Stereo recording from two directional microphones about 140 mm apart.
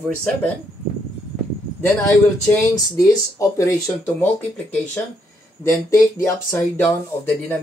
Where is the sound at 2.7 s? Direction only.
25° left (ahead or behind).